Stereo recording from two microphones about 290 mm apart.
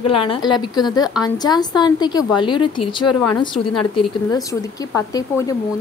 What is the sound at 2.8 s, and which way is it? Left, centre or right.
Speech, left.